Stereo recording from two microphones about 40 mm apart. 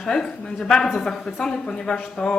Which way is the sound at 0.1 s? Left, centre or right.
Centre.